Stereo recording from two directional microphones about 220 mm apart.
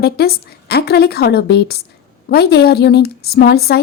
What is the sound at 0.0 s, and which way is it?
A woman's voice, 45° left (ahead or behind).